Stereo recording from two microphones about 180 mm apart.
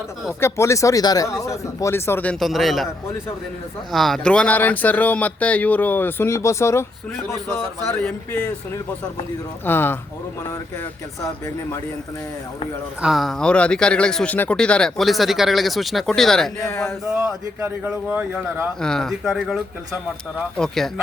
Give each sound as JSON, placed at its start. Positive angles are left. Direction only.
{"t": 0.3, "sound": "speech", "side_deg": 15}
{"t": 3.9, "sound": "speech", "side_deg": 0}
{"t": 8.0, "sound": "speech", "side_deg": 10}
{"t": 13.0, "sound": "speech", "side_deg": 0}
{"t": 16.6, "sound": "speech", "side_deg": 15}
{"t": 17.2, "sound": "a man's voice", "side_deg": -10}
{"t": 18.8, "sound": "speech", "side_deg": 5}